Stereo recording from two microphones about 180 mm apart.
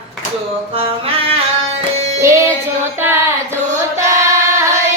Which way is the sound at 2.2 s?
15° right (ahead or behind).